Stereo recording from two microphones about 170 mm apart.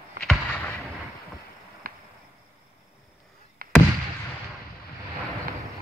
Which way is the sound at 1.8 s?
60° right (ahead or behind).